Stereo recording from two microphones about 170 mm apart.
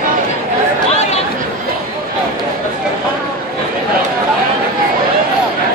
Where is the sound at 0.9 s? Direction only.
40° left (ahead or behind).